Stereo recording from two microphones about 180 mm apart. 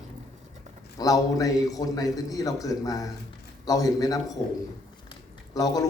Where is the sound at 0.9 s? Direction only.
20° left (ahead or behind).